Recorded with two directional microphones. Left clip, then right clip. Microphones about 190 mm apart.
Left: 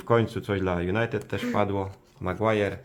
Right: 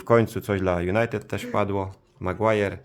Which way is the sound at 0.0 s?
40° right (ahead or behind).